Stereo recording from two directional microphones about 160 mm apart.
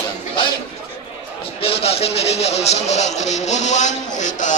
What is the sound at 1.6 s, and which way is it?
Speech, 35° left (ahead or behind).